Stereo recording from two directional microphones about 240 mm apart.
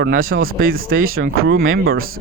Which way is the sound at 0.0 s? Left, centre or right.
Right.